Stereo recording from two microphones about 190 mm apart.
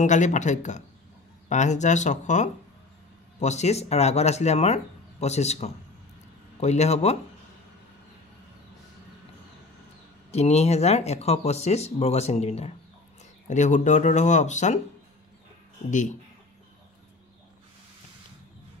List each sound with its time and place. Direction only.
0.0 s speech: 40° left (ahead or behind)
10.3 s speech: 35° left (ahead or behind)
15.9 s speech: 40° left (ahead or behind)